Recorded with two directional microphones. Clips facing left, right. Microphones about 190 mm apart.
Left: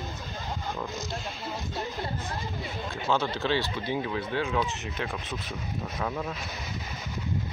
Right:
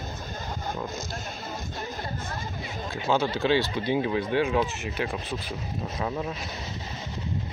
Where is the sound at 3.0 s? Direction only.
10° right (ahead or behind).